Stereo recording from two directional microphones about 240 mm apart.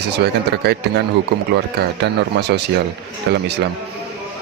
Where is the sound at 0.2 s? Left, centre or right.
Right.